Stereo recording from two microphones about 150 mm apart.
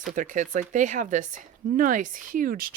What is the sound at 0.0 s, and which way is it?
Speech, 60° right (ahead or behind).